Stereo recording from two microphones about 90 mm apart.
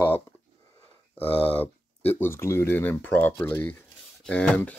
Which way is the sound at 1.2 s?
90° left.